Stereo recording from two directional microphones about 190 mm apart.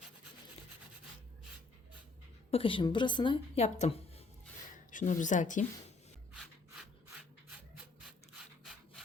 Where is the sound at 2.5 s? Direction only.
25° left (ahead or behind).